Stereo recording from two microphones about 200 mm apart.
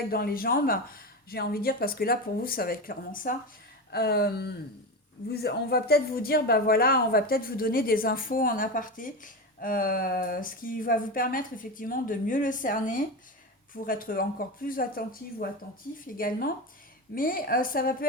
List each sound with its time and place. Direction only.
0.1 s speech: 50° left (ahead or behind)